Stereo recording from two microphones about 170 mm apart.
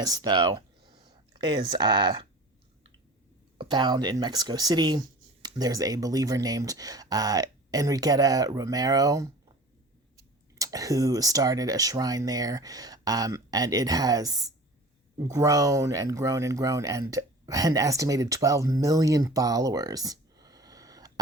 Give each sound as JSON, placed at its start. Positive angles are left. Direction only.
{"t": 0.0, "sound": "speech", "side_deg": -20}
{"t": 3.6, "sound": "speech", "side_deg": -25}
{"t": 10.6, "sound": "speech", "side_deg": -20}